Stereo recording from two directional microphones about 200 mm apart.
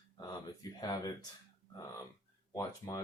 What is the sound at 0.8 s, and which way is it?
Speech, 20° left (ahead or behind).